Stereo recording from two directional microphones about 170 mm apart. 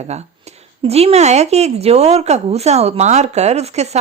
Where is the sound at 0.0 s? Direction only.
40° right (ahead or behind).